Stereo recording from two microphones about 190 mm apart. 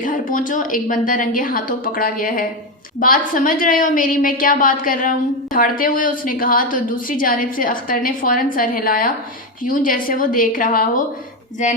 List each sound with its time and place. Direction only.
0.0 s a woman's voice: 45° left (ahead or behind)